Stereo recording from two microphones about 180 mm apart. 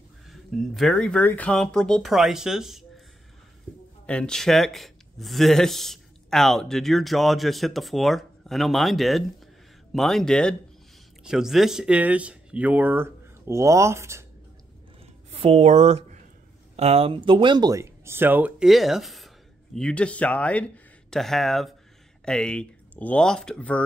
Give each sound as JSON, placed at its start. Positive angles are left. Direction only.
{"t": 0.3, "sound": "speech", "side_deg": 0}
{"t": 4.0, "sound": "speech", "side_deg": 5}
{"t": 15.3, "sound": "speech", "side_deg": -35}